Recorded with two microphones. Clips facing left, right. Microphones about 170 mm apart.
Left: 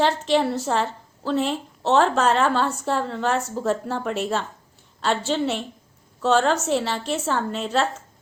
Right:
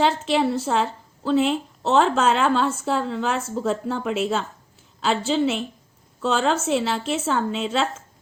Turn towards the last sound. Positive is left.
turn(degrees=0)  # may be behind; listen again after turning